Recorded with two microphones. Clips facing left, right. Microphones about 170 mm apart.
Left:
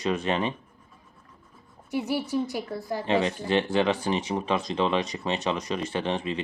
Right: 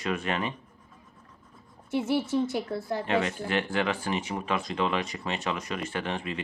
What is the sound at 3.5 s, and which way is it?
Speech, 25° left (ahead or behind).